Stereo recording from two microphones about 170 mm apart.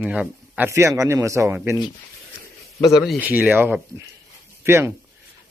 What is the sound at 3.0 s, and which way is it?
A man's voice, 5° right (ahead or behind).